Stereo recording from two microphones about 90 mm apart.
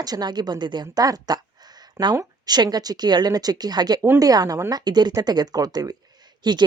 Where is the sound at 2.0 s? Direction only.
30° right (ahead or behind).